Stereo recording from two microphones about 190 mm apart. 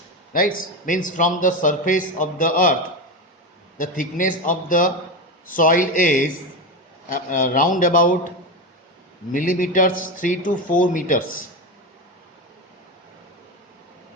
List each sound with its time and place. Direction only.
0.3 s a man's voice: 50° left (ahead or behind)
3.8 s a man's voice: 45° left (ahead or behind)
9.3 s a man's voice: 45° left (ahead or behind)